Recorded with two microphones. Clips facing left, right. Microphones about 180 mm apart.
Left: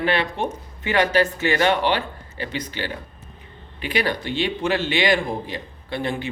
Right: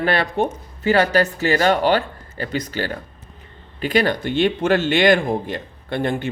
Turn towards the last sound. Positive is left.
turn(degrees=-50)  # may be behind; listen again after turning